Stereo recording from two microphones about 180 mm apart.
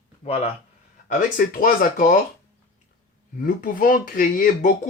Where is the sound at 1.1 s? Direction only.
50° left (ahead or behind).